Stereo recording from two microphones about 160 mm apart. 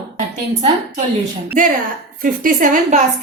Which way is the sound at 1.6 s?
55° right (ahead or behind).